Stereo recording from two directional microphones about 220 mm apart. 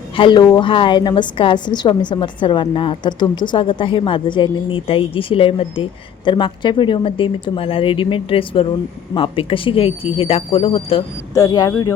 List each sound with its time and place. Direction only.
0.2 s a woman's voice: 20° left (ahead or behind)